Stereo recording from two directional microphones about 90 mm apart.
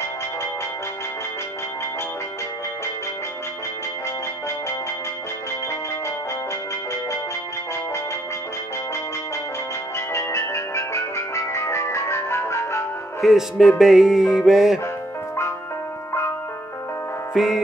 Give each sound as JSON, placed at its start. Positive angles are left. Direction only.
{"t": 9.9, "sound": "music", "side_deg": 30}
{"t": 13.2, "sound": "music", "side_deg": 0}
{"t": 17.3, "sound": "music", "side_deg": -5}